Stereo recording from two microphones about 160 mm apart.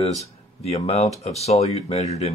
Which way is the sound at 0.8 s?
40° left (ahead or behind).